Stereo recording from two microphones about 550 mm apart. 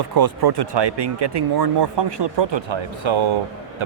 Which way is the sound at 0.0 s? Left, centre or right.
Right.